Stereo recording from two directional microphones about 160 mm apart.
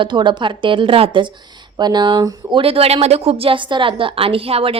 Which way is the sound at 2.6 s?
35° right (ahead or behind).